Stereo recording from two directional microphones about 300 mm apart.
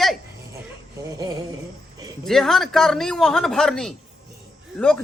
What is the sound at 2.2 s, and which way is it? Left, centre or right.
Speech, centre.